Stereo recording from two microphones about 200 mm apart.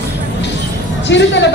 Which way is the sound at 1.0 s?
60° left (ahead or behind).